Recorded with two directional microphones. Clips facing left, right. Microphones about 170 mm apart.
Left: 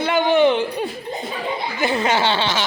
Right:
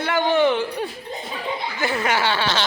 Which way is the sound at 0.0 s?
15° left (ahead or behind).